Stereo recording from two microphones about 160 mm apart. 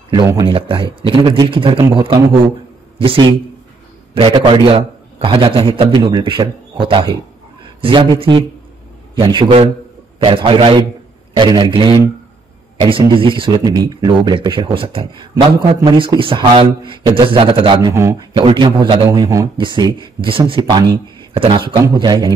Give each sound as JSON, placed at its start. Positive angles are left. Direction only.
{"t": 0.5, "sound": "a man's voice", "side_deg": -35}
{"t": 13.1, "sound": "a man's voice", "side_deg": -30}
{"t": 19.0, "sound": "a man's voice", "side_deg": -20}